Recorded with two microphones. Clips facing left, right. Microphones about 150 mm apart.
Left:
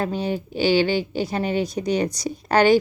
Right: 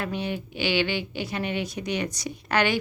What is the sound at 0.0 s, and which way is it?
A woman's voice, 40° left (ahead or behind).